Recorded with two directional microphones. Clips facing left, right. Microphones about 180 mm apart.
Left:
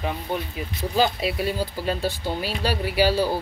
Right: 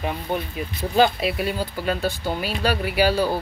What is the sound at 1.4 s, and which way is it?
Speech, 30° left (ahead or behind).